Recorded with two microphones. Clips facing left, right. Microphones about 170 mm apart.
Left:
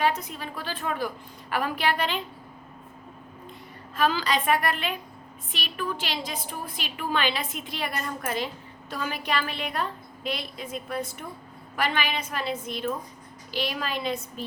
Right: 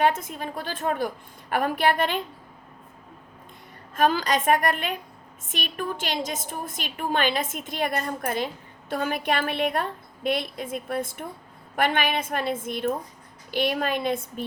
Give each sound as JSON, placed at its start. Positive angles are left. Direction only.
{"t": 0.0, "sound": "a woman's voice", "side_deg": -50}
{"t": 3.9, "sound": "a woman's voice", "side_deg": -50}